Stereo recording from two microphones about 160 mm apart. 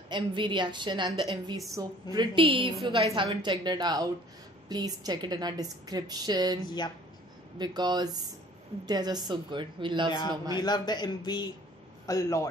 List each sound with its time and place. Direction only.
0.1 s a woman's voice: 30° right (ahead or behind)
6.6 s speech: 25° left (ahead or behind)
7.5 s a woman's voice: 25° right (ahead or behind)
10.6 s speech: 25° left (ahead or behind)